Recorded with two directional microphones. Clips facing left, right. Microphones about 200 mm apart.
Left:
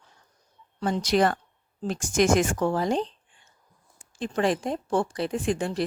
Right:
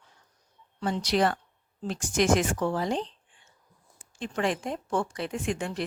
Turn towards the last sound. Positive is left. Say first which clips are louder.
# left 4 dB
turn(degrees=35)  # may be behind; listen again after turning